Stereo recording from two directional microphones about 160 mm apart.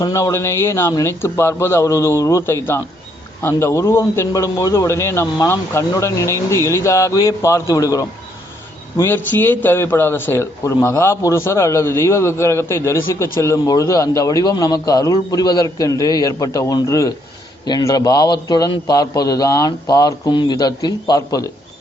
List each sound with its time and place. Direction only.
0.0 s a man's voice: 20° left (ahead or behind)